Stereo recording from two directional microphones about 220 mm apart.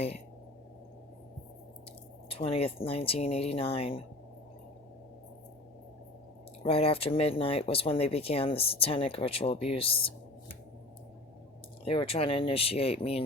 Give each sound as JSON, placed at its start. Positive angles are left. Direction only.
{"t": 2.3, "sound": "speech", "side_deg": 25}
{"t": 6.6, "sound": "speech", "side_deg": 25}
{"t": 11.9, "sound": "speech", "side_deg": 25}